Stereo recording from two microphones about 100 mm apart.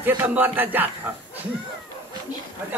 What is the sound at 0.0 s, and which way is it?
Music, 20° right (ahead or behind).